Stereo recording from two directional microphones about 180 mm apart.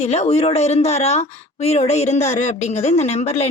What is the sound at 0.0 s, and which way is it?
Speech, 35° left (ahead or behind).